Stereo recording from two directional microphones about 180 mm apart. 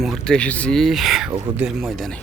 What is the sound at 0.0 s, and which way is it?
Speech, centre (ahead or behind).